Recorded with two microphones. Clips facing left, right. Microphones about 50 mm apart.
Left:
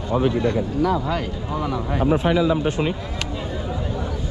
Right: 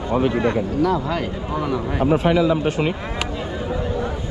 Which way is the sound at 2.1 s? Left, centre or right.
Right.